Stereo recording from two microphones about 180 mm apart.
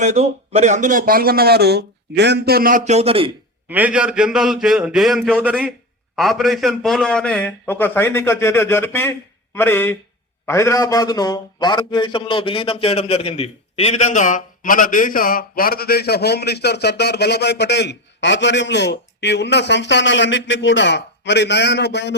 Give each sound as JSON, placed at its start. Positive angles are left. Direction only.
{"t": 0.0, "sound": "speech", "side_deg": -40}
{"t": 3.7, "sound": "a man's voice", "side_deg": -10}